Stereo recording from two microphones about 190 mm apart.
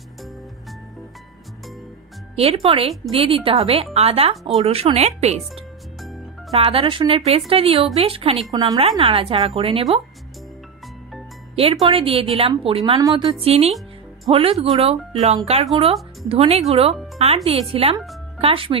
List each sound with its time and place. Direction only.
2.3 s a woman's voice: 30° right (ahead or behind)
6.5 s a woman's voice: 30° right (ahead or behind)
11.7 s a woman's voice: 25° right (ahead or behind)